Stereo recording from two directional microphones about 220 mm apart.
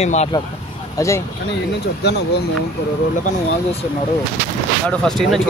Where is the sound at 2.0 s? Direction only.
50° left (ahead or behind).